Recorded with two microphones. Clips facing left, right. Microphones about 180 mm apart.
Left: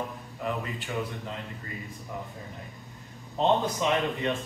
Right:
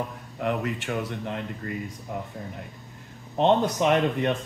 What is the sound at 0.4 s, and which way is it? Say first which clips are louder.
Speech: right 5 dB; 70° right (ahead or behind).